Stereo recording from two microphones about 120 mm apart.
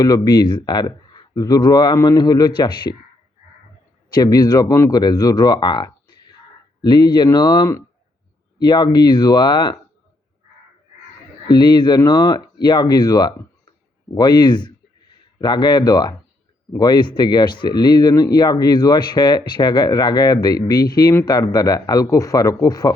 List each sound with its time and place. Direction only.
0.0 s speech: 35° left (ahead or behind)
4.1 s speech: 30° left (ahead or behind)
11.4 s speech: 40° left (ahead or behind)